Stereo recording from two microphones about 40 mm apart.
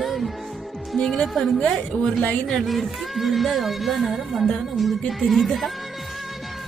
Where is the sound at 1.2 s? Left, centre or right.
Centre.